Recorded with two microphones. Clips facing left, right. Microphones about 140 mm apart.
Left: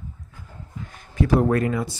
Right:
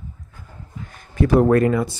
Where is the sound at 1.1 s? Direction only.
55° right (ahead or behind).